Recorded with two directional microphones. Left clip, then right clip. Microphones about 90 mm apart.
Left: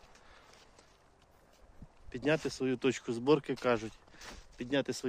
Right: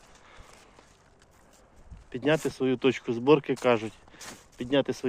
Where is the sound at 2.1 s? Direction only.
35° left (ahead or behind).